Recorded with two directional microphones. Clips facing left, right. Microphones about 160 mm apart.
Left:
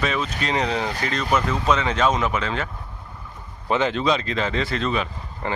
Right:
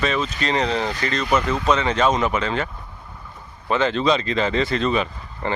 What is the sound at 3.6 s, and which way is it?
Speech, 15° left (ahead or behind).